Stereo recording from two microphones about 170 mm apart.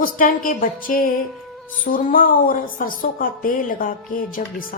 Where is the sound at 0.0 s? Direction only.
55° left (ahead or behind).